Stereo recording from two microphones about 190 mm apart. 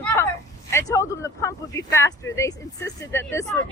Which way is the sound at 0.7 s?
15° left (ahead or behind).